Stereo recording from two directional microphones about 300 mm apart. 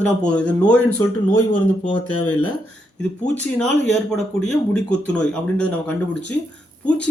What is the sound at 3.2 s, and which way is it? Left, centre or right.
Speech, centre.